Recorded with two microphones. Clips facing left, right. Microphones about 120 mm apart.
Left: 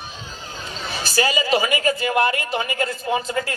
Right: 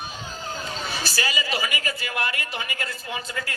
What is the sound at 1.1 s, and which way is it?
A man's voice, 30° left (ahead or behind).